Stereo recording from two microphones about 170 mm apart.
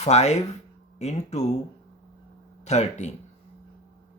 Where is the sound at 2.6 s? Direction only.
40° left (ahead or behind).